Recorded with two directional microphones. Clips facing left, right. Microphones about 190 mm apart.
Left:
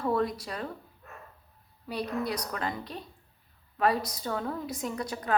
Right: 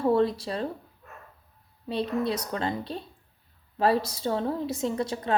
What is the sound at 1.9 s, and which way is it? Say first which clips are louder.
A woman's voice: right 4 dB; 25° right (ahead or behind).